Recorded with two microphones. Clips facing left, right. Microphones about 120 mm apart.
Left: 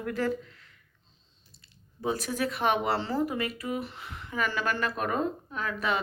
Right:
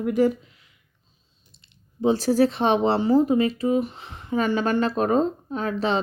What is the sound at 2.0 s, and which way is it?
Speech, 30° right (ahead or behind).